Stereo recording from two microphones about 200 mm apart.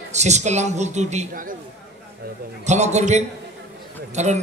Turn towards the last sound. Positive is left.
turn(degrees=-35)  # may be behind; listen again after turning